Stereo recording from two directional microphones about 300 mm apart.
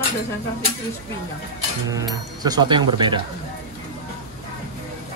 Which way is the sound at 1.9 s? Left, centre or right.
Centre.